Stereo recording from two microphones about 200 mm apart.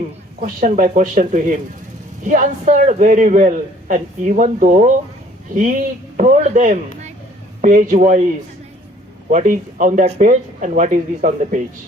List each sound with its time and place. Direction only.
0.4 s a man's voice: 40° right (ahead or behind)
9.3 s a man's voice: 40° right (ahead or behind)